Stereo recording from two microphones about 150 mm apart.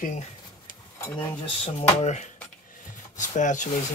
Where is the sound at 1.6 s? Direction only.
50° left (ahead or behind).